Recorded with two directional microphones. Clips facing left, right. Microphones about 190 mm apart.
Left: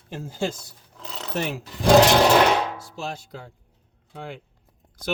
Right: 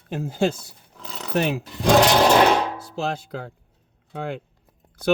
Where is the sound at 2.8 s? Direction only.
65° right (ahead or behind).